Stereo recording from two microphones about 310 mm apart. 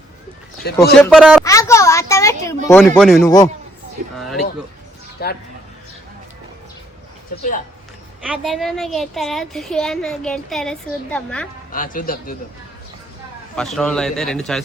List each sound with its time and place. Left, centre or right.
0.6 s speech: left
0.9 s a woman's voice: centre
1.5 s a sound: centre
2.6 s a woman's voice: centre
5.2 s speech: left
8.3 s a woman's voice: centre
11.7 s speech: left
13.6 s a woman's voice: centre